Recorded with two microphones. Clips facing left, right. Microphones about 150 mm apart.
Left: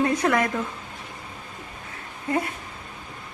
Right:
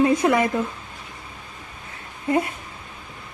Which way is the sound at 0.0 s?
10° right (ahead or behind).